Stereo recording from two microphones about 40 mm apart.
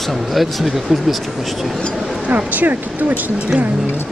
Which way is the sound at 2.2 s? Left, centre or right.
Right.